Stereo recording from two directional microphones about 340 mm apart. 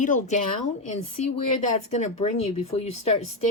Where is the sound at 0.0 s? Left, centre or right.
Left.